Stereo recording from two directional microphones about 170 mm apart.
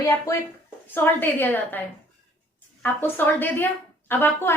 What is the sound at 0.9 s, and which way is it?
Speech, 10° left (ahead or behind).